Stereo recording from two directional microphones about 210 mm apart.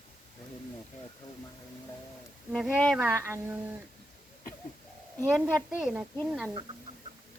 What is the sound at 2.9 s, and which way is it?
Speech, 10° right (ahead or behind).